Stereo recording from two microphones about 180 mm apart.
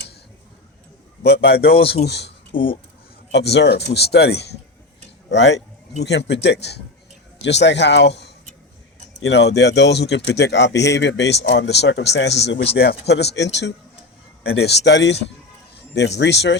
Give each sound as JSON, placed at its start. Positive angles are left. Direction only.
{"t": 1.2, "sound": "speech", "side_deg": 65}
{"t": 2.5, "sound": "speech", "side_deg": 30}
{"t": 3.3, "sound": "speech", "side_deg": 70}